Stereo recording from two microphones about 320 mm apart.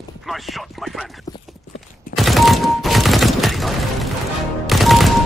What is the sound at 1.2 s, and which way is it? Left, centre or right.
Clip-clop, centre.